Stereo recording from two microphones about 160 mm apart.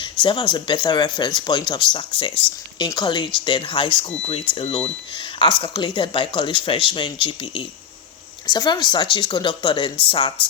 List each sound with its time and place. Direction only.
0.0 s speech: 30° left (ahead or behind)